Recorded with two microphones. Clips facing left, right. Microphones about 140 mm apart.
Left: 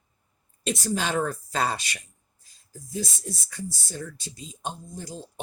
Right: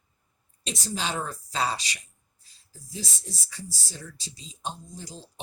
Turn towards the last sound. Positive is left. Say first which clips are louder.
# left 4 dB
turn(degrees=50)  # may be behind; listen again after turning